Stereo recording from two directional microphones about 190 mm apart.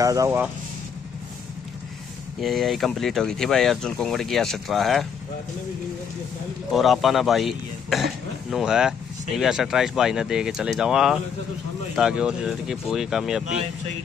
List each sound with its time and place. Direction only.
0.0 s speech: 15° right (ahead or behind)
2.4 s speech: centre (ahead or behind)
6.7 s speech: centre (ahead or behind)